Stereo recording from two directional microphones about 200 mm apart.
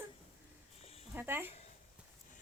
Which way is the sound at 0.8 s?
30° left (ahead or behind).